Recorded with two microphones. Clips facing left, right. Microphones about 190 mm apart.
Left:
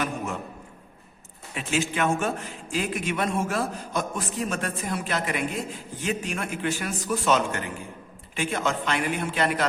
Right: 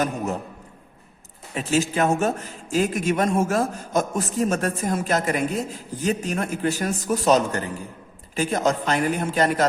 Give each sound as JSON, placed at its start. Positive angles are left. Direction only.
{"t": 1.5, "sound": "speech", "side_deg": -40}